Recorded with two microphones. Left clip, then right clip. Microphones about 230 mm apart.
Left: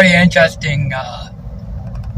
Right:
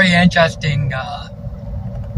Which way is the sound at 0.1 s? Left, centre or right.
Left.